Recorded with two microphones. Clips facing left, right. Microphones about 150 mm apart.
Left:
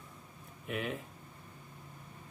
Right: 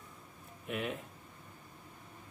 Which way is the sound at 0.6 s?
Centre (ahead or behind).